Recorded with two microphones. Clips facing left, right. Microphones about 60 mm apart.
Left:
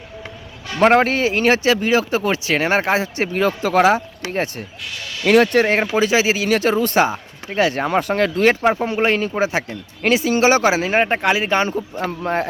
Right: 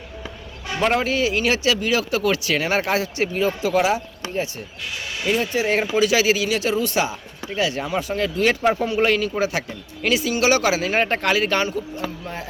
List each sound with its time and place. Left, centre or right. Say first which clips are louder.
0.8 s speech: left 6 dB; left
3.3 s speech: left 4 dB; left
5.2 s speech: left 9 dB; left
5.6 s speech: left 2 dB; left
6.5 s speech: left 5 dB; left
8.6 s speech: left 2 dB; left
12.2 s speech: left 11 dB; left